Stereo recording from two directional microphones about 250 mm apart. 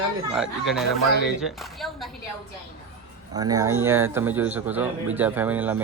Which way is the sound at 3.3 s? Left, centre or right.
Centre.